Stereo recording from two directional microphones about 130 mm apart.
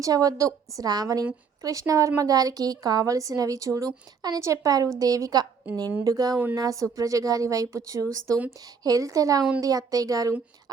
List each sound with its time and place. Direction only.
0.0 s a woman's voice: 30° right (ahead or behind)